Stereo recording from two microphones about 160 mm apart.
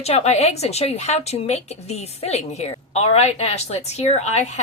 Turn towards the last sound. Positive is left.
turn(degrees=45)  # may be behind; listen again after turning